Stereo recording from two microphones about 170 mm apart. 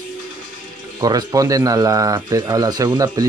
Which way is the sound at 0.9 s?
25° right (ahead or behind).